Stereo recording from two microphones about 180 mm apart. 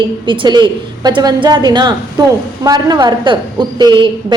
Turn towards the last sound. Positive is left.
turn(degrees=-25)  # may be behind; listen again after turning